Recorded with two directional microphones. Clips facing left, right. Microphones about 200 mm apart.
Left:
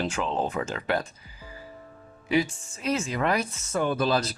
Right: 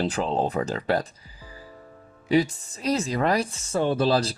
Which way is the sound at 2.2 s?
35° right (ahead or behind).